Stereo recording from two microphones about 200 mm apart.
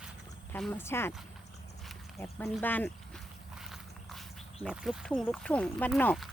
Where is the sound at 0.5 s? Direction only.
10° left (ahead or behind).